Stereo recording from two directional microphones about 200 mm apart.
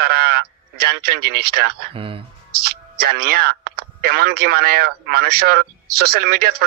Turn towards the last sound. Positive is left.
turn(degrees=-50)  # may be behind; listen again after turning